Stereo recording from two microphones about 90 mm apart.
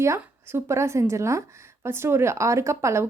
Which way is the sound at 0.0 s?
30° right (ahead or behind).